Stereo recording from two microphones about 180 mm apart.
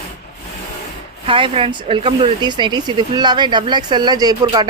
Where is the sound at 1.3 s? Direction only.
30° right (ahead or behind).